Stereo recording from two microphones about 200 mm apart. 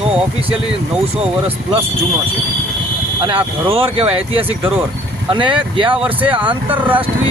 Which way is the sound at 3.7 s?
30° right (ahead or behind).